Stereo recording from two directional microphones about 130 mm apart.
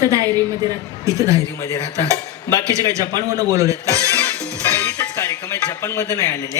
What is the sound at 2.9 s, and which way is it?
Speech, 25° right (ahead or behind).